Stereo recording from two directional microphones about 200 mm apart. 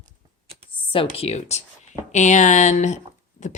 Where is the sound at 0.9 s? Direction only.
30° left (ahead or behind).